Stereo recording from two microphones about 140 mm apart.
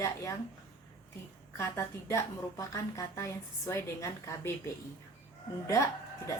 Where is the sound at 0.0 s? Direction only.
20° left (ahead or behind).